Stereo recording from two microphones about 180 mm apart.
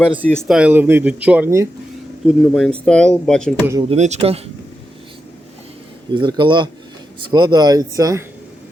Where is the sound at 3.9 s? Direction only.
40° right (ahead or behind).